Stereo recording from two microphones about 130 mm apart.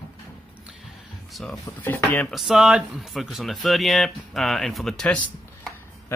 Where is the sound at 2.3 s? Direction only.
Centre (ahead or behind).